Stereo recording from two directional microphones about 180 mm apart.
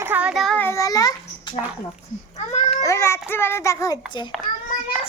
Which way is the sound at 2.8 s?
15° left (ahead or behind).